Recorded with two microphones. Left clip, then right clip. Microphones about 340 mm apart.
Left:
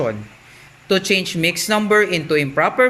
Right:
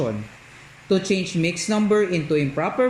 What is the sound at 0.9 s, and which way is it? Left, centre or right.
Speech, left.